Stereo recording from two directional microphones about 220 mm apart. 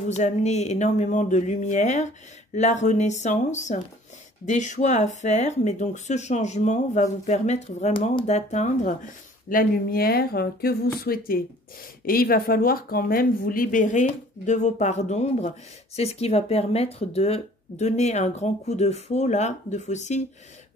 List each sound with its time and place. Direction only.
0.1 s speech: 30° left (ahead or behind)